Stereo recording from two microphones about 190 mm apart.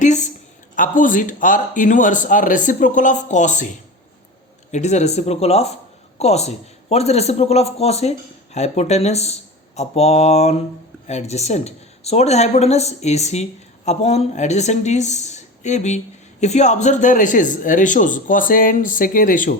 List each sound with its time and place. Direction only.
0.8 s speech: 45° left (ahead or behind)
4.7 s speech: 35° left (ahead or behind)